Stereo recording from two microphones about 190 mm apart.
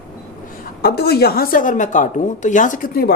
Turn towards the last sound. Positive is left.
turn(degrees=50)  # may be behind; listen again after turning